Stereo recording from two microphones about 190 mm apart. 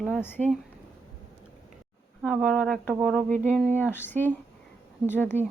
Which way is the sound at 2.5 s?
5° left (ahead or behind).